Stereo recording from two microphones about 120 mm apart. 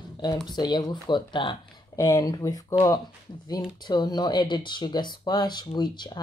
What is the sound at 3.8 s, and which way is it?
Speech, 35° left (ahead or behind).